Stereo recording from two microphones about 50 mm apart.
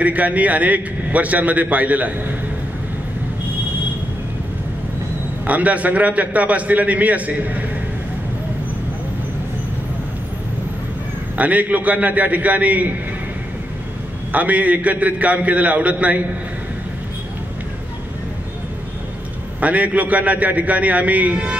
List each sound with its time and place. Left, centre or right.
0.0 s a man's voice: right
5.5 s a man's voice: right
11.3 s a man's voice: right
14.3 s a man's voice: right
19.6 s a man's voice: right